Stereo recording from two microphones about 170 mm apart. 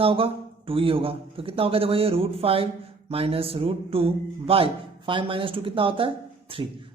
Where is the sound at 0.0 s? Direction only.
35° right (ahead or behind).